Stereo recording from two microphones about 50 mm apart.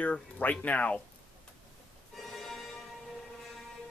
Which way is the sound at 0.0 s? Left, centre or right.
Left.